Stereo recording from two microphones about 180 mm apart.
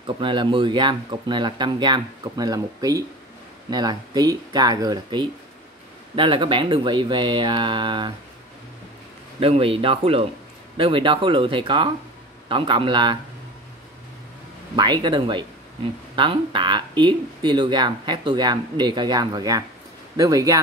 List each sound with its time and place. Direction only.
0.0 s speech: 25° right (ahead or behind)
9.4 s speech: 30° right (ahead or behind)
14.8 s speech: 25° right (ahead or behind)